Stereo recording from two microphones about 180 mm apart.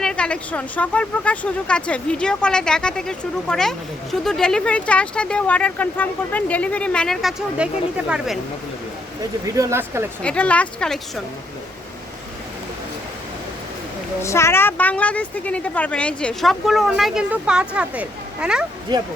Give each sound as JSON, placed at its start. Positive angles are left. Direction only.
{"t": 0.0, "sound": "speech", "side_deg": 5}
{"t": 9.5, "sound": "speech", "side_deg": -15}
{"t": 10.2, "sound": "a woman's voice", "side_deg": 5}
{"t": 14.2, "sound": "a woman's voice", "side_deg": 15}
{"t": 18.9, "sound": "speech", "side_deg": -25}